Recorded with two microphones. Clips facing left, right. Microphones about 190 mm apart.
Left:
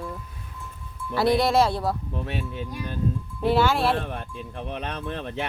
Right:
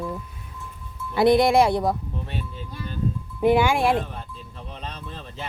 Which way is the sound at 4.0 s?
65° left (ahead or behind).